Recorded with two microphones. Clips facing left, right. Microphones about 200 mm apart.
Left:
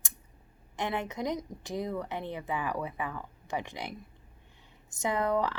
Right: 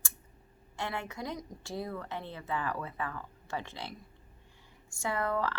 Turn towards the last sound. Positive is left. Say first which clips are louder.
# left 4 dB
turn(degrees=15)  # may be behind; listen again after turning